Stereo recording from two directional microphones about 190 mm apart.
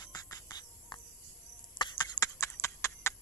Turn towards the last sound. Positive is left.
turn(degrees=15)  # may be behind; listen again after turning